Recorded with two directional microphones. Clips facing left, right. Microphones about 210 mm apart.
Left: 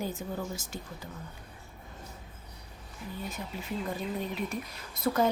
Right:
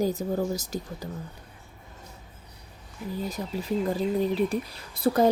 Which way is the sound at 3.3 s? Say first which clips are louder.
Right 9 dB; 35° right (ahead or behind).